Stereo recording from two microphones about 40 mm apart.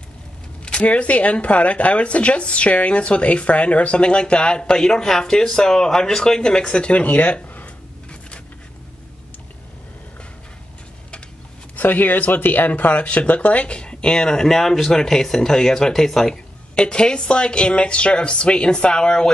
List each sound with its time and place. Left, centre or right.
0.7 s speech: left
7.6 s a sound: left
11.7 s speech: left; by 16.3 s centre
16.7 s speech: left